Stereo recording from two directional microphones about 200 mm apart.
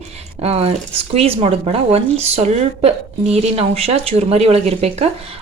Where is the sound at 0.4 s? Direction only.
30° right (ahead or behind).